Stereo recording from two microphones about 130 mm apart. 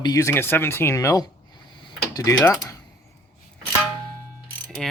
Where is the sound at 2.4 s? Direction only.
20° left (ahead or behind).